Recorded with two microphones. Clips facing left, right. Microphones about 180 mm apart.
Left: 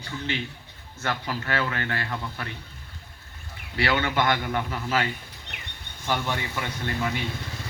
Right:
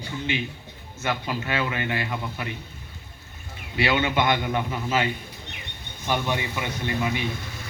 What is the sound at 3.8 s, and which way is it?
A man's voice, 20° right (ahead or behind).